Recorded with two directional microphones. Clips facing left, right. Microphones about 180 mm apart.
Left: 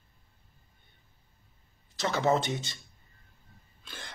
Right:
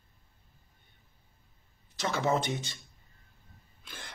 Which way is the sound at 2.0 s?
20° left (ahead or behind).